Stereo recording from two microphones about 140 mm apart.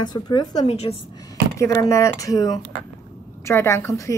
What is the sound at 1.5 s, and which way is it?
A woman's voice, 20° left (ahead or behind).